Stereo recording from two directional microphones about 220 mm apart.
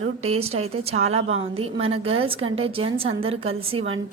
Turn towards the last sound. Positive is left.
turn(degrees=-25)  # may be behind; listen again after turning